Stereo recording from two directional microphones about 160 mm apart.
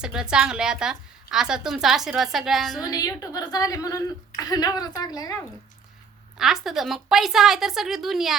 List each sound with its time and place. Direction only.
0.0 s a woman's voice: 5° right (ahead or behind)
2.8 s a woman's voice: 25° left (ahead or behind)
6.3 s a woman's voice: centre (ahead or behind)